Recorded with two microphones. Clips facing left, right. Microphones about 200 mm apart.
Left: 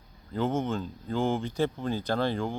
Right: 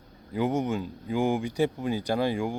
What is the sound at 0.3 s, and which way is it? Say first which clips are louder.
Speech: right 2 dB; 15° right (ahead or behind).